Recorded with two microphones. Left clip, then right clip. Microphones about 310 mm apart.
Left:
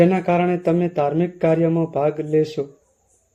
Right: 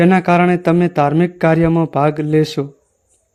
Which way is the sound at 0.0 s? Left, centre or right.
Right.